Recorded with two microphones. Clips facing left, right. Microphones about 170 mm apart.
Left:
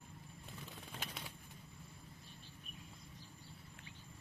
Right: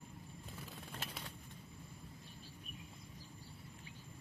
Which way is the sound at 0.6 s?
Centre (ahead or behind).